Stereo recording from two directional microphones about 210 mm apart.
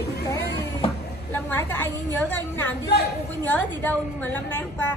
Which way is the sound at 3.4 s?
10° left (ahead or behind).